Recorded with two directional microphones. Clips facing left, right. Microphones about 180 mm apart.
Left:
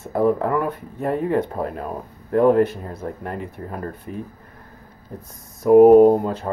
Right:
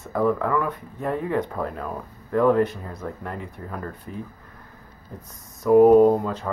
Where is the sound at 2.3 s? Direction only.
45° left (ahead or behind).